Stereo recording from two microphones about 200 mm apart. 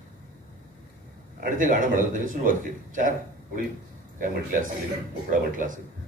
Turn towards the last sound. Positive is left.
turn(degrees=-40)  # may be behind; listen again after turning